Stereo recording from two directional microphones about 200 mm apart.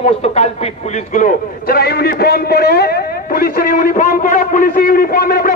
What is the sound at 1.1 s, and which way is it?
A man's voice, 45° left (ahead or behind).